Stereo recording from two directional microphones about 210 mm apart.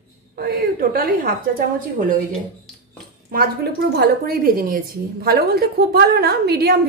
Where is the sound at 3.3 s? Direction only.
50° right (ahead or behind).